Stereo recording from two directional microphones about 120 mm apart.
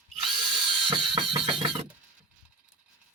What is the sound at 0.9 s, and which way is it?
Music, 45° right (ahead or behind).